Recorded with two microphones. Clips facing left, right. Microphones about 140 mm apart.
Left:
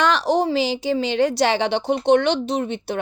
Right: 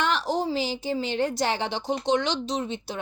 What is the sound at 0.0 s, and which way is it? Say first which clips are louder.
A woman's voice: left 7 dB; 80° left.